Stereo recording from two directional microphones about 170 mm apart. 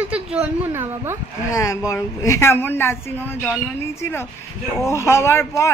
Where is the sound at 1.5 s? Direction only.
20° left (ahead or behind).